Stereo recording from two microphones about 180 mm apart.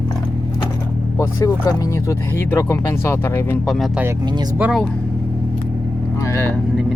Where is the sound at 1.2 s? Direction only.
15° left (ahead or behind).